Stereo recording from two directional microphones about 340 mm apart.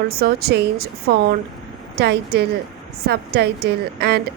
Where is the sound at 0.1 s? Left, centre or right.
Right.